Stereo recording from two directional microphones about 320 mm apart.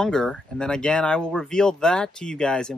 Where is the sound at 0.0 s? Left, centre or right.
Centre.